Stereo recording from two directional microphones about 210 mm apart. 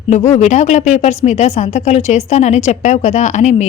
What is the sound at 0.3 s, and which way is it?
A woman's voice, 35° left (ahead or behind).